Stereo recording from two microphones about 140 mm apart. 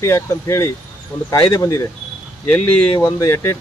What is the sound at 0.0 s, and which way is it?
Speech, 20° left (ahead or behind).